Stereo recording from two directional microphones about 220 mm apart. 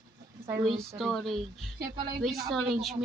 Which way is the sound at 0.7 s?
Centre (ahead or behind).